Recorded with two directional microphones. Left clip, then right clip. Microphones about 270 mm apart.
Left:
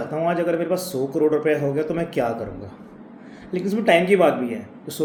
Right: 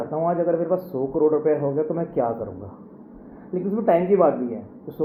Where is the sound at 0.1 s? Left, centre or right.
Left.